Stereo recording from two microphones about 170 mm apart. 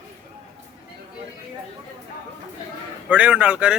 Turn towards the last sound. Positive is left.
turn(degrees=-5)  # may be behind; listen again after turning